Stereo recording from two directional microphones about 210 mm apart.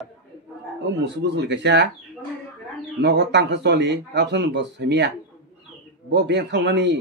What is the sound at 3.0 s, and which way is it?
A man's voice, 55° right (ahead or behind).